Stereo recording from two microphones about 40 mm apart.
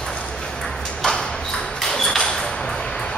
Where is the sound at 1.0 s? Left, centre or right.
Centre.